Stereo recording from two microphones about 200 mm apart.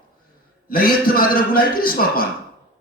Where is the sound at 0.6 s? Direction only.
45° left (ahead or behind).